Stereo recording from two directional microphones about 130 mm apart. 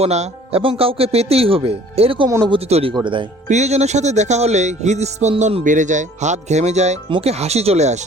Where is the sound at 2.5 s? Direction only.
50° right (ahead or behind).